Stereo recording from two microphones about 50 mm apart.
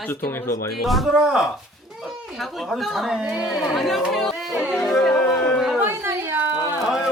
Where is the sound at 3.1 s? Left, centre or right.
Centre.